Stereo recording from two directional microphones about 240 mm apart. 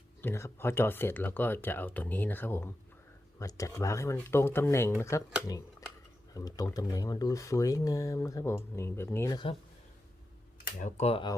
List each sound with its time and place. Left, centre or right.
0.2 s speech: centre
6.3 s speech: centre
10.6 s speech: left